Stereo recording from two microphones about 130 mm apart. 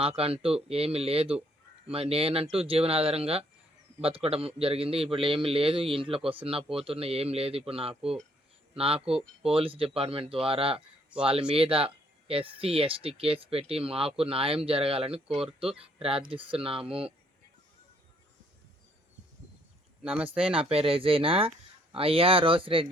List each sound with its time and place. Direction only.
0.0 s speech: 45° right (ahead or behind)
9.4 s speech: 45° right (ahead or behind)
11.1 s speech: 10° right (ahead or behind)
11.5 s speech: 45° right (ahead or behind)
15.3 s speech: 5° right (ahead or behind)
15.8 s speech: 45° right (ahead or behind)
20.0 s speech: 10° right (ahead or behind)
20.6 s speech: 45° right (ahead or behind)